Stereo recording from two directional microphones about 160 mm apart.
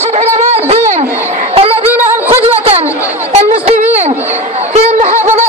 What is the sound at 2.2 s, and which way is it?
Music, 40° right (ahead or behind).